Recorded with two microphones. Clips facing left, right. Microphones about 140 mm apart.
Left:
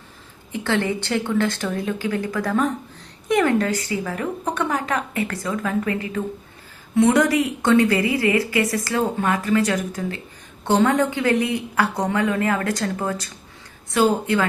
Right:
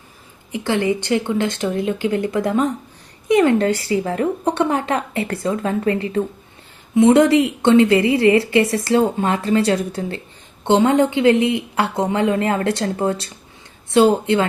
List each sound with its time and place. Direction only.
0.5 s a woman's voice: 15° right (ahead or behind)